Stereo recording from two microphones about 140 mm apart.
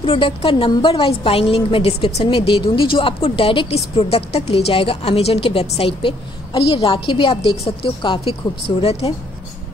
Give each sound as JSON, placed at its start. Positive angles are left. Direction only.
{"t": 0.0, "sound": "a woman's voice", "side_deg": 40}